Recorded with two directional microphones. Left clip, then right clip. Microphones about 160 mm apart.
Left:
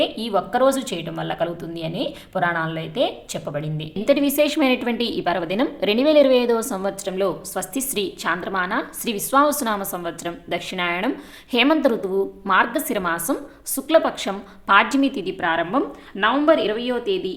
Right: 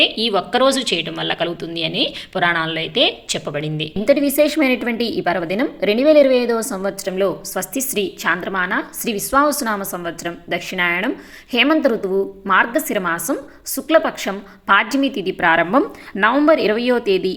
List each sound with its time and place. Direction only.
0.0 s a woman's voice: 10° right (ahead or behind)
15.4 s a woman's voice: 30° right (ahead or behind)